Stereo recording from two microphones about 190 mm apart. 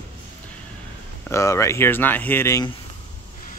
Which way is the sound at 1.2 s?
15° left (ahead or behind).